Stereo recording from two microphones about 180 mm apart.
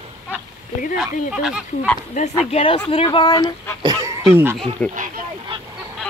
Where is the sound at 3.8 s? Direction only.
20° right (ahead or behind).